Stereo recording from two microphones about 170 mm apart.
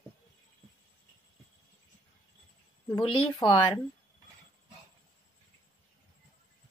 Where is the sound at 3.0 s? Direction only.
30° left (ahead or behind).